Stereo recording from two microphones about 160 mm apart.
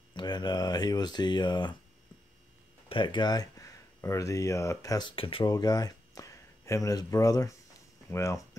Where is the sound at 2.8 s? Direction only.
30° left (ahead or behind).